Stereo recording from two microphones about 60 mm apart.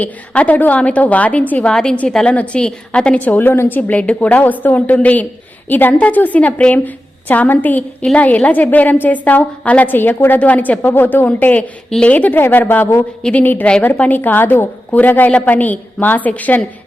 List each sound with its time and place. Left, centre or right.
0.0 s a woman's voice: left
1.7 s a woman's voice: centre
3.2 s a woman's voice: left
11.9 s a woman's voice: centre
12.1 s a woman's voice: left